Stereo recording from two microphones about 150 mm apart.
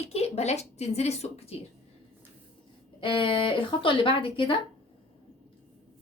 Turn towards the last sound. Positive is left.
turn(degrees=35)  # may be behind; listen again after turning